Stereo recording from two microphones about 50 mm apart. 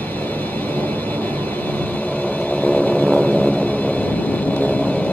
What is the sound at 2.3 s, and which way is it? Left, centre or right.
Vehicle, left.